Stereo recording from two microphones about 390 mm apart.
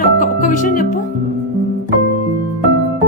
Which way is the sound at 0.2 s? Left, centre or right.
Centre.